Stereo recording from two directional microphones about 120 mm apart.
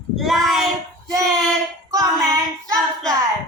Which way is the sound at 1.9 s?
30° right (ahead or behind).